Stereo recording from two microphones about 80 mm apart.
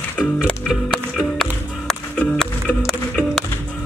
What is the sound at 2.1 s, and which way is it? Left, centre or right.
Music, centre.